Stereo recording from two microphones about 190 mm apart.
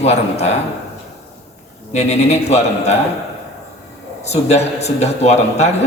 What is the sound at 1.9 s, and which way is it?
A man's voice, 35° left (ahead or behind).